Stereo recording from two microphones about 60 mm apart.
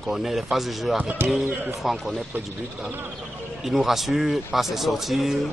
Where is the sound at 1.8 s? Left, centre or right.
Centre.